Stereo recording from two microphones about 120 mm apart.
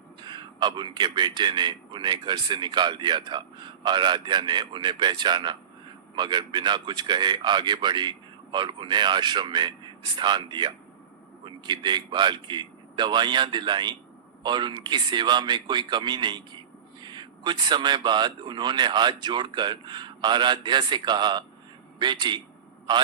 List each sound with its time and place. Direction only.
0.2 s a man's voice: 40° right (ahead or behind)